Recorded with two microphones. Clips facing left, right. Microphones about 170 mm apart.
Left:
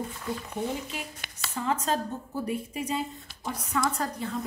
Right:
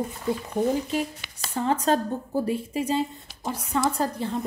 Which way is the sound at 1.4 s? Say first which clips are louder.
Right 5 dB; 35° right (ahead or behind).